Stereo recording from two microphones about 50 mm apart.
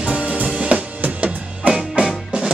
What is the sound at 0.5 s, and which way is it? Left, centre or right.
Drum kit, right.